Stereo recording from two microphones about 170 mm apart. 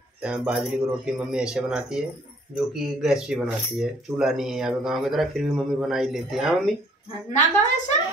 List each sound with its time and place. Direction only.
0.2 s speech: 5° right (ahead or behind)
7.2 s a woman's voice: 45° left (ahead or behind)